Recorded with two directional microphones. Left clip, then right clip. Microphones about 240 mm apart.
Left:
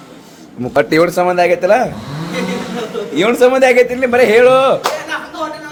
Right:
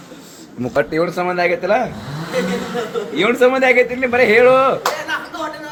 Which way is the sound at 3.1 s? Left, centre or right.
Left.